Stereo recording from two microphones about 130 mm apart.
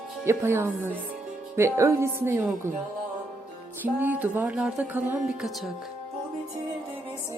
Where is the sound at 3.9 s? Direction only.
15° right (ahead or behind).